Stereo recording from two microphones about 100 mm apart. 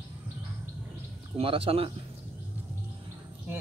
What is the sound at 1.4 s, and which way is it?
Speech, 70° right (ahead or behind).